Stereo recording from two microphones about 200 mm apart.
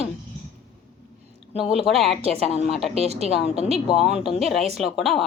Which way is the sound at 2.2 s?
30° right (ahead or behind).